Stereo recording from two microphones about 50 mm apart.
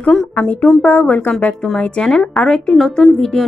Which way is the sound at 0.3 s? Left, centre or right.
Left.